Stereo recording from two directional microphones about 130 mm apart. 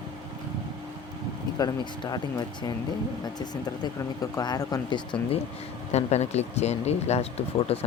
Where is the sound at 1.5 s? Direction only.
30° left (ahead or behind).